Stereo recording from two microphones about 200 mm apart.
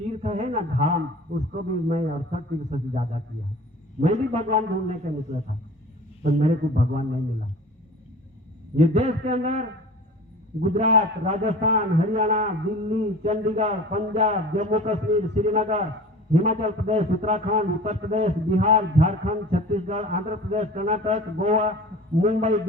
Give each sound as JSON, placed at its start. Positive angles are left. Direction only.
{"t": 0.1, "sound": "a man's voice", "side_deg": -35}
{"t": 8.7, "sound": "a man's voice", "side_deg": -30}